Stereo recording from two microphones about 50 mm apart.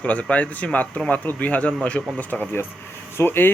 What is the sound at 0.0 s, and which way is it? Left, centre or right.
Speech, left.